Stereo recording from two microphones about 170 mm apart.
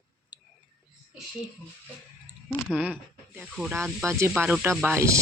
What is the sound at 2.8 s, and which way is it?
Speech, 10° right (ahead or behind).